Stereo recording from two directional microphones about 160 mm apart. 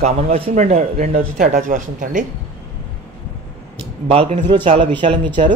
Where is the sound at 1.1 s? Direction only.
60° right (ahead or behind).